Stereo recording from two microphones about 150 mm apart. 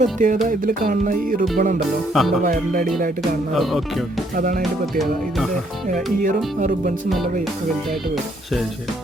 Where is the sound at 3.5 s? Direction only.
Centre (ahead or behind).